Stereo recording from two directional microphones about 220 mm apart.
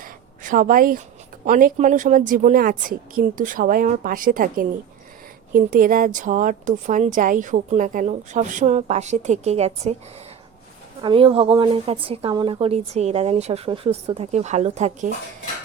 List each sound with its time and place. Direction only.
0.0 s a sound: 35° right (ahead or behind)
1.5 s speech: 40° right (ahead or behind)
11.0 s a woman's voice: 25° right (ahead or behind)